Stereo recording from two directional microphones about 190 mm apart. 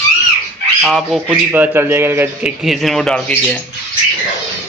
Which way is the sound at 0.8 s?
Centre (ahead or behind).